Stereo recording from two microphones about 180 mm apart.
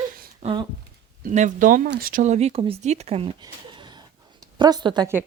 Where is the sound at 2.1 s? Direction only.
40° right (ahead or behind).